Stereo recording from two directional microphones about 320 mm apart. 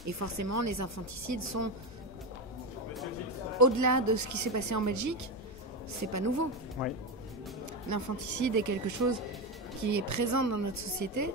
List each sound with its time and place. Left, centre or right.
0.2 s a woman's voice: right
3.5 s a woman's voice: right
6.8 s speech: centre
7.9 s a woman's voice: right